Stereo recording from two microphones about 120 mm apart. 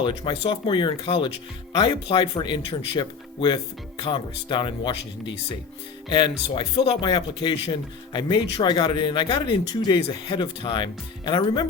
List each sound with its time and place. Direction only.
0.0 s speech: 45° left (ahead or behind)